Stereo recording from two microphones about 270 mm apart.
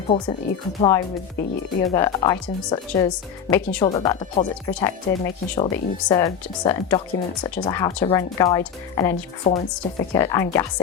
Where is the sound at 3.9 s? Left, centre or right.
Left.